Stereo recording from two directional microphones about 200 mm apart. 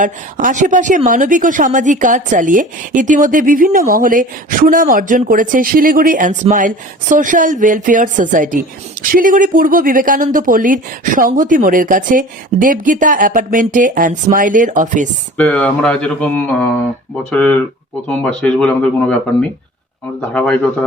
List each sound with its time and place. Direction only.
0.0 s speech: 40° right (ahead or behind)
15.4 s speech: 5° left (ahead or behind)